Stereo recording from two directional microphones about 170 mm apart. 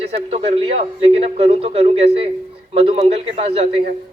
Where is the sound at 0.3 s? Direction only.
35° right (ahead or behind).